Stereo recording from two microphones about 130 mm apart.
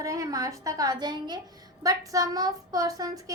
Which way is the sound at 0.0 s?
25° right (ahead or behind).